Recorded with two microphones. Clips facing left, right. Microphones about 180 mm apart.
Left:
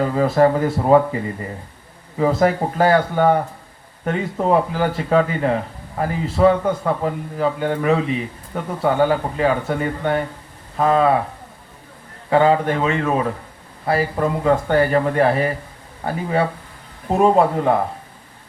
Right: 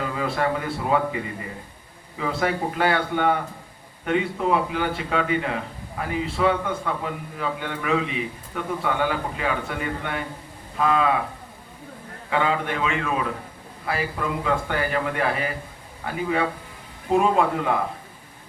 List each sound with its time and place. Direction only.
0.0 s a man's voice: 40° left (ahead or behind)
12.3 s a man's voice: 35° left (ahead or behind)